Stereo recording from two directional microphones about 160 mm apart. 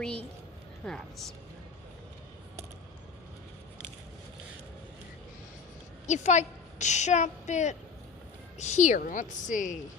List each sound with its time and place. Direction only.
0.0 s speech: 5° left (ahead or behind)
6.1 s a woman's voice: 50° left (ahead or behind)